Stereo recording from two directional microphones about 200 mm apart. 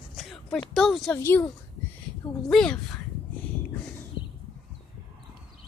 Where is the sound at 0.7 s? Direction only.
Centre (ahead or behind).